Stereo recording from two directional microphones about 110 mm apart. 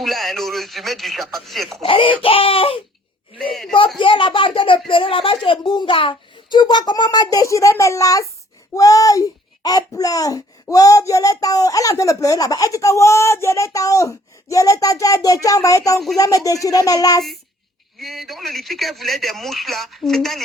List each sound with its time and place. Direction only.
0.0 s speech: centre (ahead or behind)
1.8 s speech: 55° left (ahead or behind)
3.5 s a man's voice: 5° left (ahead or behind)
3.9 s a child's voice: 50° left (ahead or behind); by 17.2 s 35° left (ahead or behind)
17.9 s speech: centre (ahead or behind)